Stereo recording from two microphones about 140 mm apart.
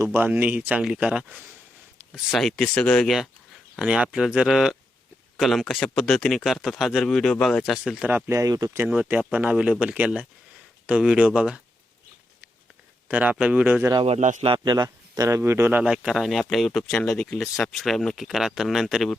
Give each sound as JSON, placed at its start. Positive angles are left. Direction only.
{"t": 0.0, "sound": "speech", "side_deg": -15}
{"t": 8.0, "sound": "speech", "side_deg": -15}
{"t": 8.8, "sound": "speech", "side_deg": -10}
{"t": 13.1, "sound": "speech", "side_deg": -10}
{"t": 14.0, "sound": "a man's voice", "side_deg": -55}
{"t": 14.4, "sound": "speech", "side_deg": -35}